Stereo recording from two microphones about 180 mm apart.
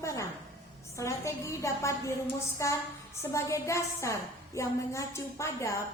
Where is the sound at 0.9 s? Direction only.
15° left (ahead or behind).